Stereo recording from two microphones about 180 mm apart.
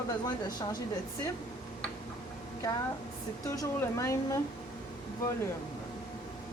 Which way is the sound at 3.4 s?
20° left (ahead or behind).